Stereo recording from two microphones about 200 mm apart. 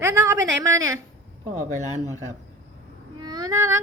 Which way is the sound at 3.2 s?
20° right (ahead or behind).